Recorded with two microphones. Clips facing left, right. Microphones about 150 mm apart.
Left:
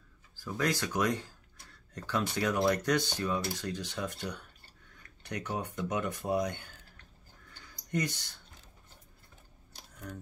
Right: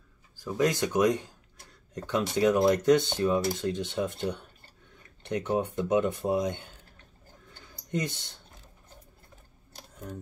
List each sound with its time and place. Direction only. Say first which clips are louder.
0.4 s speech: right 6 dB; 20° right (ahead or behind)
7.9 s speech: right 2 dB; 25° right (ahead or behind)